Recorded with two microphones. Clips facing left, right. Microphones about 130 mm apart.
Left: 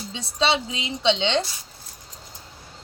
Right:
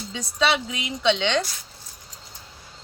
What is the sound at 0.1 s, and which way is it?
A woman's voice, 25° left (ahead or behind).